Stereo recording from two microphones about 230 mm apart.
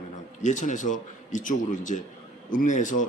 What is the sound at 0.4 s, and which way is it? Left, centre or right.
A man's voice, left.